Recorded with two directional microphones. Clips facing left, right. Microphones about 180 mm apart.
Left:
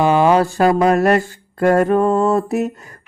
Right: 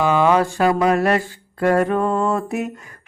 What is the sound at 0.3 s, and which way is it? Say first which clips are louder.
Mantra: left 3 dB; 40° left (ahead or behind).